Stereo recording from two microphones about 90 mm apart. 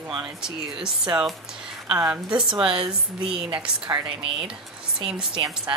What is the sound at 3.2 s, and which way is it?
Speech, 90° right.